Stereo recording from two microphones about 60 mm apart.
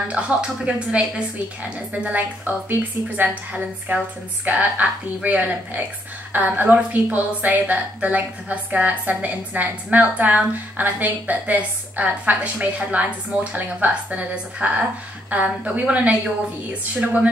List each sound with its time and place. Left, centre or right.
0.3 s a woman's voice: centre